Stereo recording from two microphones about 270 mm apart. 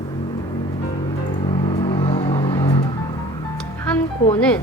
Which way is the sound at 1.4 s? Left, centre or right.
Left.